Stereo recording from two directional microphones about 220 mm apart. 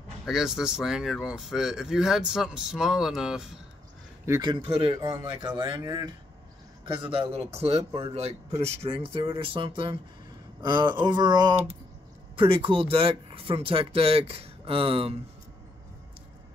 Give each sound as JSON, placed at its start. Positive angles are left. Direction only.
{"t": 0.2, "sound": "speech", "side_deg": 0}
{"t": 4.3, "sound": "speech", "side_deg": -20}